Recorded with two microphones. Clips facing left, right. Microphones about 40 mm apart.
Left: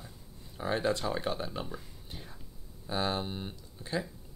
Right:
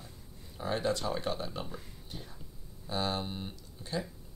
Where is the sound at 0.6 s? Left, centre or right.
Centre.